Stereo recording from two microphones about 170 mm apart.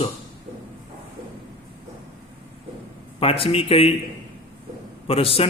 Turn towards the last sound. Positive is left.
turn(degrees=35)  # may be behind; listen again after turning